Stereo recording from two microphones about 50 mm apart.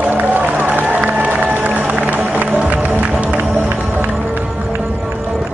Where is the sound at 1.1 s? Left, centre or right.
Right.